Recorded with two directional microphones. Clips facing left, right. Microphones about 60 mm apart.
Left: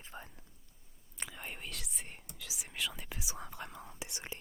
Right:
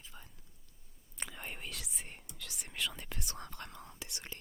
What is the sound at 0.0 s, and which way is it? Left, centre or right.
Whispering, left.